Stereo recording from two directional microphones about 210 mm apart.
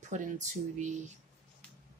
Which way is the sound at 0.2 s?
35° right (ahead or behind).